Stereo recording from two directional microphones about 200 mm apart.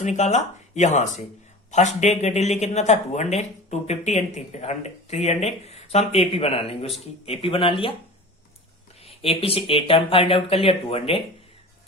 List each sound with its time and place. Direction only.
0.0 s speech: 35° left (ahead or behind)
9.0 s speech: 30° left (ahead or behind)